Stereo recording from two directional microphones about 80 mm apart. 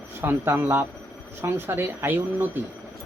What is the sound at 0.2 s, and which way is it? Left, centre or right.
A man's voice, right.